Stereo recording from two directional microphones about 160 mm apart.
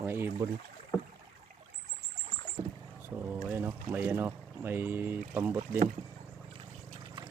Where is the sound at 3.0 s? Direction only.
15° right (ahead or behind).